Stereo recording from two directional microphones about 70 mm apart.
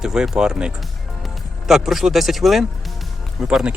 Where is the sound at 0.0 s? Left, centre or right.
Centre.